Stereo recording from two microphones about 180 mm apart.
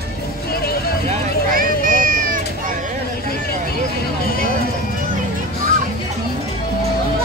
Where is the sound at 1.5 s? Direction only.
50° right (ahead or behind).